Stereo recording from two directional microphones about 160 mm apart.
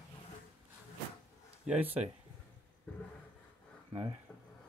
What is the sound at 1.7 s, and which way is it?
Speech, 10° right (ahead or behind).